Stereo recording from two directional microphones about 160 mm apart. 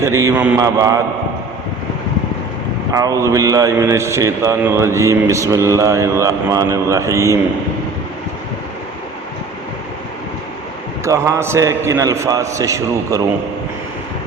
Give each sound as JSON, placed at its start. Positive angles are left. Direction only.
{"t": 0.0, "sound": "a man's voice", "side_deg": -20}
{"t": 2.9, "sound": "a man's voice", "side_deg": -20}
{"t": 11.0, "sound": "a man's voice", "side_deg": -20}